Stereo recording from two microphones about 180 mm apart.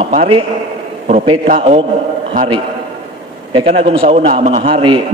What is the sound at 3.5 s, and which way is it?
A man's voice, 30° right (ahead or behind).